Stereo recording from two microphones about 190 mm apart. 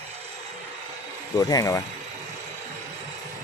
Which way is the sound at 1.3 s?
20° left (ahead or behind).